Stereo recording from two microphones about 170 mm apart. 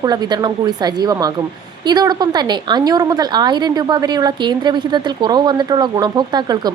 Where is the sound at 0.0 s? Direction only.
25° right (ahead or behind).